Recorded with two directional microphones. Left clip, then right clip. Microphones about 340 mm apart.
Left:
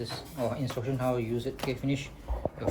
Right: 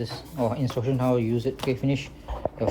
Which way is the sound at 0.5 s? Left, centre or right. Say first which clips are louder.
Right 6 dB; centre.